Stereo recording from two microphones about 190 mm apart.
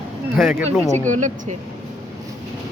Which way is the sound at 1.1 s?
40° right (ahead or behind).